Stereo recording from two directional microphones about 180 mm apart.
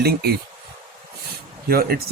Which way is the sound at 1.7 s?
55° right (ahead or behind).